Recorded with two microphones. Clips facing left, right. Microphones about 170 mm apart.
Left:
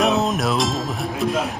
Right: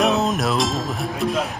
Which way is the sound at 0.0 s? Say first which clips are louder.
Even; centre (ahead or behind).